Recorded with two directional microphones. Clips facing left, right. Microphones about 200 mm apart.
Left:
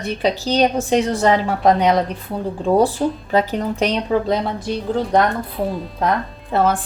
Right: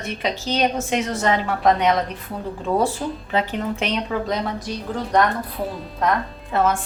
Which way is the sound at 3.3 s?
40° left (ahead or behind).